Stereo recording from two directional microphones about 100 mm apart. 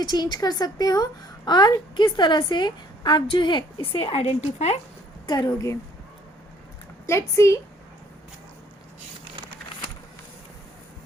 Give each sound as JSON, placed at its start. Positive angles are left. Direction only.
{"t": 0.0, "sound": "a woman's voice", "side_deg": 45}
{"t": 3.9, "sound": "a woman's voice", "side_deg": 75}
{"t": 5.3, "sound": "a woman's voice", "side_deg": 35}
{"t": 7.1, "sound": "speech", "side_deg": 30}